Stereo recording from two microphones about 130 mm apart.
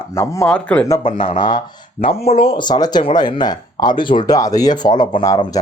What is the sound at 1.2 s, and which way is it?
Speech, 35° left (ahead or behind).